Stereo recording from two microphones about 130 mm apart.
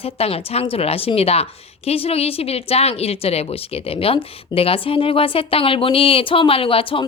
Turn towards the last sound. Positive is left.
turn(degrees=45)  # may be behind; listen again after turning